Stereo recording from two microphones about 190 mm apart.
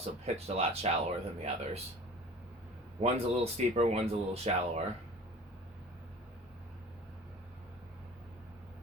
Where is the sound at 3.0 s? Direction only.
35° right (ahead or behind).